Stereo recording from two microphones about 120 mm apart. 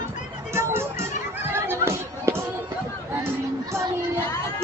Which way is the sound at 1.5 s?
20° right (ahead or behind).